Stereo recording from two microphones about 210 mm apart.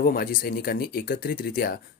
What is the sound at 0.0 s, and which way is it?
Speech, 45° left (ahead or behind).